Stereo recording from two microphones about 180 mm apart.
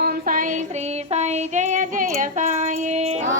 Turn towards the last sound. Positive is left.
turn(degrees=-40)  # may be behind; listen again after turning